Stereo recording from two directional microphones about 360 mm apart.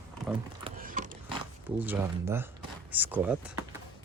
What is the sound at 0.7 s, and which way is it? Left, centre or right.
Horse, right.